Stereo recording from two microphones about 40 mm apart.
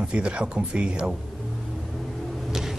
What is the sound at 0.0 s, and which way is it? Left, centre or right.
Speech, right.